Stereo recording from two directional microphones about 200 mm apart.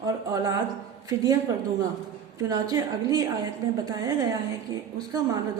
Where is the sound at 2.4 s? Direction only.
20° right (ahead or behind).